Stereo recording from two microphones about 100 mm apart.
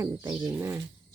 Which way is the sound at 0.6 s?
20° right (ahead or behind).